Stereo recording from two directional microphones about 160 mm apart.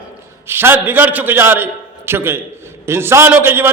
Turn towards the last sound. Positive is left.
turn(degrees=-15)  # may be behind; listen again after turning